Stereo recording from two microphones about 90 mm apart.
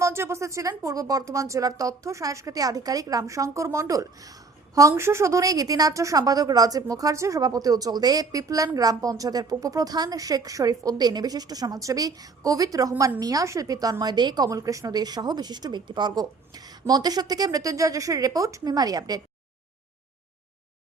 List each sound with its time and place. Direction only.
0.0 s a woman's voice: 30° right (ahead or behind)